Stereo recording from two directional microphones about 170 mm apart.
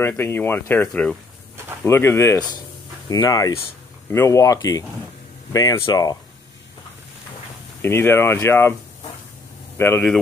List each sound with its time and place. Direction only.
0.0 s speech: 10° left (ahead or behind)
7.8 s speech: 15° left (ahead or behind)
9.8 s speech: 10° left (ahead or behind)